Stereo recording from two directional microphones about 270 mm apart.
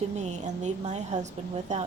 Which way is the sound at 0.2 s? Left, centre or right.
Right.